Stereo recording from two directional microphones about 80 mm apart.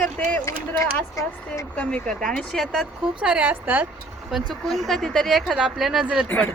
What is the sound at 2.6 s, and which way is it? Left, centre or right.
Speech, centre.